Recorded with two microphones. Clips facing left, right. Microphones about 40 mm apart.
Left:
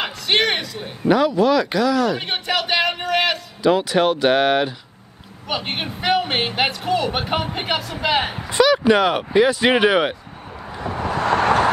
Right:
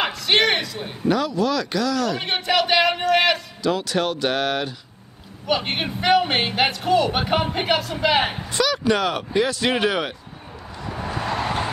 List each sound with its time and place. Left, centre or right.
0.3 s speech: centre
1.0 s speech: centre
2.2 s speech: centre
3.6 s speech: centre
5.5 s speech: centre
8.5 s speech: left
11.0 s vehicle: left